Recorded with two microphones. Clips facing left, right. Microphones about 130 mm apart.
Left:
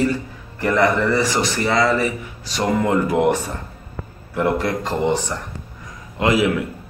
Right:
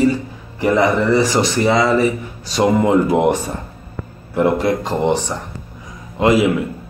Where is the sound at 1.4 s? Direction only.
20° right (ahead or behind).